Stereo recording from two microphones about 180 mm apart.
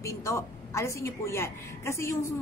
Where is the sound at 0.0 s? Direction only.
15° left (ahead or behind).